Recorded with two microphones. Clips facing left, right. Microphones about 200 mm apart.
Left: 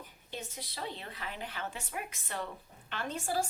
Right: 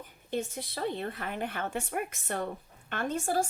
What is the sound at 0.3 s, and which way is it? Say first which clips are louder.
A woman's voice: right 10 dB; 55° right (ahead or behind).